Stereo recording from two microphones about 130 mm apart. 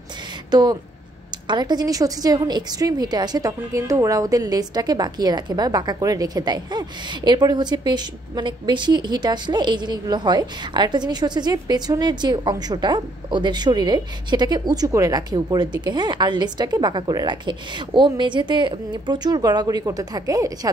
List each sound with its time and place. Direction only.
0.5 s a woman's voice: 35° right (ahead or behind)